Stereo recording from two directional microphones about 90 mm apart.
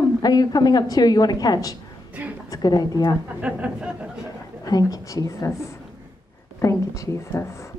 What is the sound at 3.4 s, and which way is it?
Speech, 15° right (ahead or behind).